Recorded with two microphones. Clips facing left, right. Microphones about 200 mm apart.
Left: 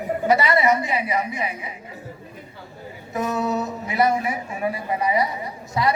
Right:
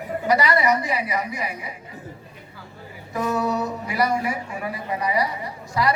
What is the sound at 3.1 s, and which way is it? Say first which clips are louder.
A woman's voice: even; 25° left (ahead or behind).